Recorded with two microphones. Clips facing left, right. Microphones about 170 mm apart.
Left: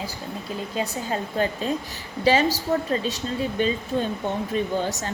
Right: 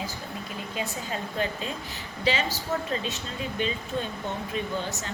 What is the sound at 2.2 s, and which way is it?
Speech, 40° left (ahead or behind).